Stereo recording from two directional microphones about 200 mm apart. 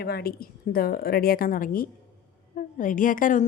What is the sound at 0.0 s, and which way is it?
A woman's voice, 50° left (ahead or behind).